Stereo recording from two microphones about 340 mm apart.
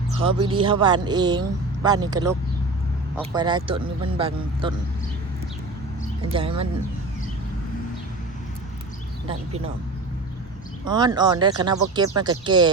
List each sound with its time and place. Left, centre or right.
0.2 s speech: centre
6.3 s speech: centre
10.8 s speech: centre